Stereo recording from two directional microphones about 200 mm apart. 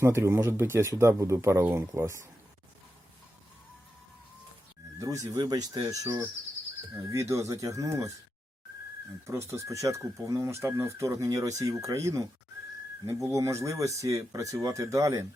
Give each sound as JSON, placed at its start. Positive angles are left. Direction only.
{"t": 0.0, "sound": "speech", "side_deg": -15}
{"t": 4.9, "sound": "speech", "side_deg": -15}
{"t": 9.2, "sound": "speech", "side_deg": -15}